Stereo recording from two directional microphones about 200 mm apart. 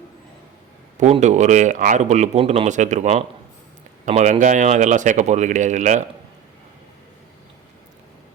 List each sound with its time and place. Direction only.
0.9 s speech: 35° right (ahead or behind)